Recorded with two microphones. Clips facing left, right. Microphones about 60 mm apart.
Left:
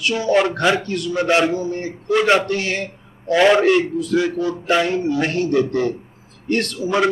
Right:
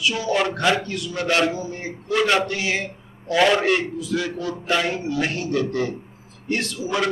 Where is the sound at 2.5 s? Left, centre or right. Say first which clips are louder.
Left 2 dB; left.